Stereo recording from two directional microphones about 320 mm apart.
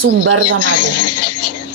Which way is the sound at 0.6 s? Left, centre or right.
Left.